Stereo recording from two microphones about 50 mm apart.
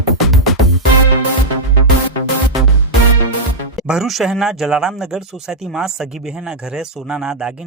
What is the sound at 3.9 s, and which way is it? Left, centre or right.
A man's voice, centre.